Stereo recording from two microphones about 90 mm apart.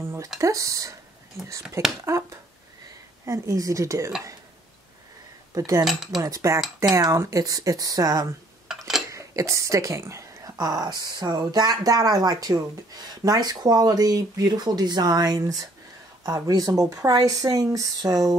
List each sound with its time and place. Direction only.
0.4 s speech: 35° right (ahead or behind)
3.3 s speech: 35° right (ahead or behind)
5.5 s speech: 45° right (ahead or behind)
5.9 s cutlery: 5° right (ahead or behind)
6.2 s speech: 35° right (ahead or behind)
8.6 s a sound: 5° right (ahead or behind)
9.1 s speech: 35° right (ahead or behind)